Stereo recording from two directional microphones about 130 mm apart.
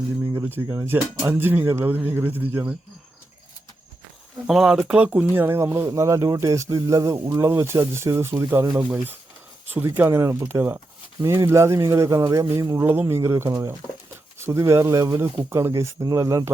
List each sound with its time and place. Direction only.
0.3 s speech: 15° right (ahead or behind)
4.4 s speech: 5° right (ahead or behind); by 8.6 s 20° right (ahead or behind)
9.6 s speech: 15° right (ahead or behind)